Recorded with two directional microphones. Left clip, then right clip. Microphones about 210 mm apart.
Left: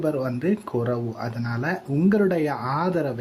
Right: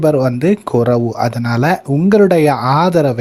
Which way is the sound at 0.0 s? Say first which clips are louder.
Right 12 dB; 40° right (ahead or behind).